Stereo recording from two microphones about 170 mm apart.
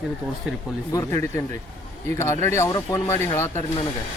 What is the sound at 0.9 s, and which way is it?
Speech, 15° left (ahead or behind).